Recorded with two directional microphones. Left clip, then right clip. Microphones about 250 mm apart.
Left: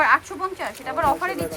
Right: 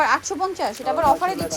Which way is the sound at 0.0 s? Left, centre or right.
Centre.